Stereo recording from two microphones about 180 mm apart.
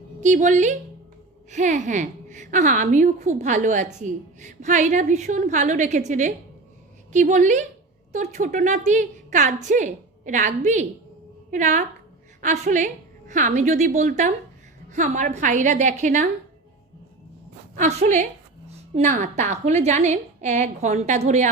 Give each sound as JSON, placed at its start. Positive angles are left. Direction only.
{"t": 0.2, "sound": "a woman's voice", "side_deg": -45}
{"t": 17.7, "sound": "a woman's voice", "side_deg": -40}